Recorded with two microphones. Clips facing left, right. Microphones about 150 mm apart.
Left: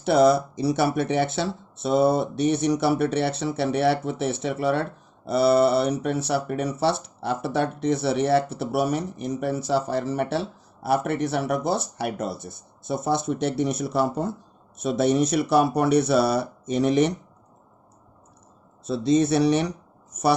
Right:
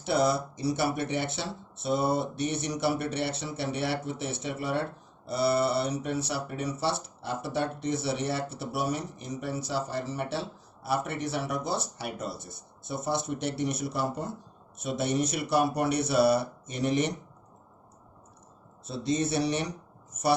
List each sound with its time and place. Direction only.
0.0 s speech: 65° left (ahead or behind); by 4.8 s 85° left
5.2 s speech: 70° left (ahead or behind)
12.9 s speech: 90° left
18.9 s speech: 90° left